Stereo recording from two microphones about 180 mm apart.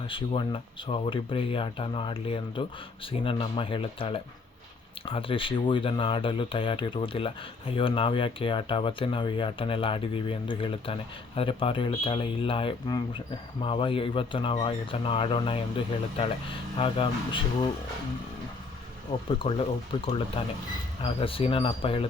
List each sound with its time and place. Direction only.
0.1 s speech: 30° left (ahead or behind)
19.4 s speech: 30° left (ahead or behind)